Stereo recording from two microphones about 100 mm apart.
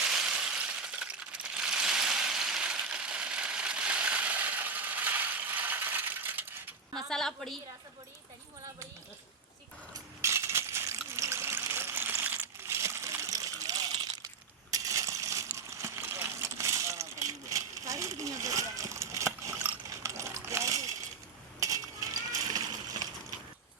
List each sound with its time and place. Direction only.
0.0 s coin: 5° right (ahead or behind)
6.9 s a woman's voice: 5° left (ahead or behind)
10.2 s water: 25° right (ahead or behind); by 14.3 s 40° right (ahead or behind)
14.7 s a sound: 35° right (ahead or behind)
20.0 s coin: 30° right (ahead or behind)
21.6 s a sound: 35° right (ahead or behind)